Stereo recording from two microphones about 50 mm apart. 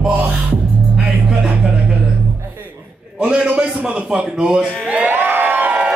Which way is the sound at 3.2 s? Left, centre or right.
Right.